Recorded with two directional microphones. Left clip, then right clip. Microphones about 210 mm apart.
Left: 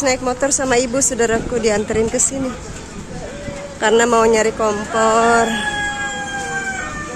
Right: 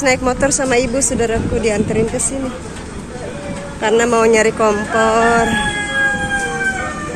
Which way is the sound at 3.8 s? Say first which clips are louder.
Even; 20° left (ahead or behind).